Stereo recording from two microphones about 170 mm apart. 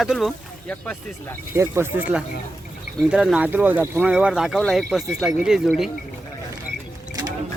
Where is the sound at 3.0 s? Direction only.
5° right (ahead or behind).